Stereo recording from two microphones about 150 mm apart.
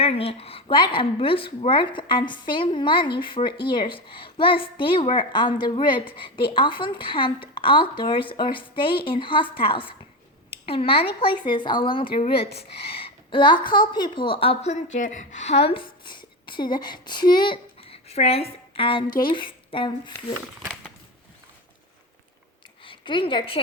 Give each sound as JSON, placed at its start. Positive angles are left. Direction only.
{"t": 0.0, "sound": "speech", "side_deg": 40}
{"t": 22.8, "sound": "a woman's voice", "side_deg": 35}